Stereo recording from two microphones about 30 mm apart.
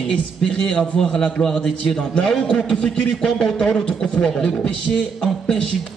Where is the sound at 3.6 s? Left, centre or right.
Left.